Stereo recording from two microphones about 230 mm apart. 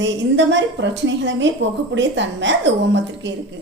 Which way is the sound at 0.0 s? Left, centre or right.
Right.